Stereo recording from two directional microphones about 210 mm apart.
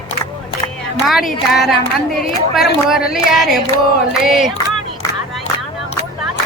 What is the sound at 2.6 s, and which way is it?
Speech, 45° left (ahead or behind).